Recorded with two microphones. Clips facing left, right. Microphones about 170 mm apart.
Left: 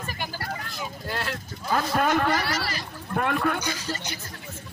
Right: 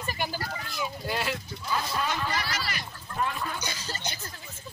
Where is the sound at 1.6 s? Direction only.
55° left (ahead or behind).